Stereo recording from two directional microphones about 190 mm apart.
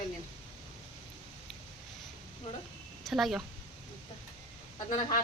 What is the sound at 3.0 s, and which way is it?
Speech, centre (ahead or behind).